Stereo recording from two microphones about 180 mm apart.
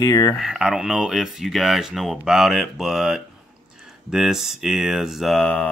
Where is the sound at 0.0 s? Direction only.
20° left (ahead or behind).